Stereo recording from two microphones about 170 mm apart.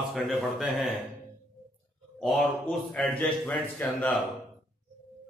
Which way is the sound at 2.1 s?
Centre (ahead or behind).